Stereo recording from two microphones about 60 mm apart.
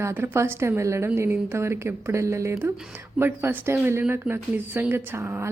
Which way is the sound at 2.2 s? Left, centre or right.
Right.